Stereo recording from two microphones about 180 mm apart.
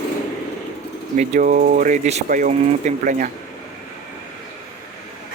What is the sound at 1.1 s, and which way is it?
Speech, 45° right (ahead or behind).